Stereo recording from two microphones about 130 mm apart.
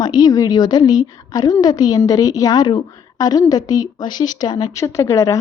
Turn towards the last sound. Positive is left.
turn(degrees=25)  # may be behind; listen again after turning